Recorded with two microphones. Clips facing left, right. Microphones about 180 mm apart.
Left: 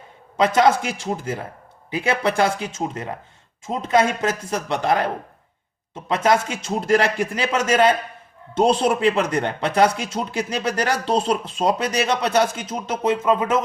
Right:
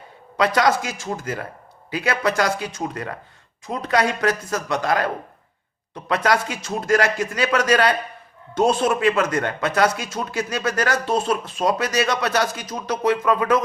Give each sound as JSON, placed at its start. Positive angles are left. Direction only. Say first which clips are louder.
{"t": 0.3, "sound": "a man's voice", "louder": "left 2 dB", "side_deg": 25}